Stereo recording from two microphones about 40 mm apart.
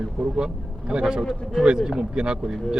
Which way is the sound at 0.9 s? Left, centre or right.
Right.